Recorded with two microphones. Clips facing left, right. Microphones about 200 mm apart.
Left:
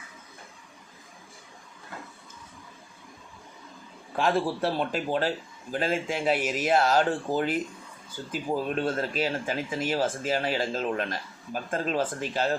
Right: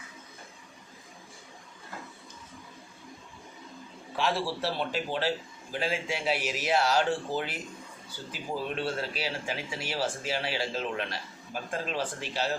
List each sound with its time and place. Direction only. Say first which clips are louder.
4.2 s speech: left 4 dB; 50° left (ahead or behind)